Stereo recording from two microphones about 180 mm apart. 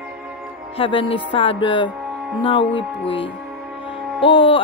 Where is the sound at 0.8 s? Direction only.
30° left (ahead or behind).